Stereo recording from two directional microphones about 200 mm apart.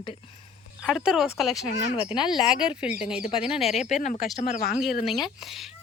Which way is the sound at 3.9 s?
35° left (ahead or behind).